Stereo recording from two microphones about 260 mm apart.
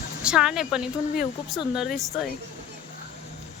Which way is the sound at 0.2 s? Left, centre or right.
Centre.